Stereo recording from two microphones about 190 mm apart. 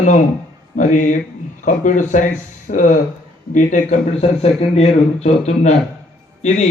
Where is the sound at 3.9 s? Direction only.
35° left (ahead or behind).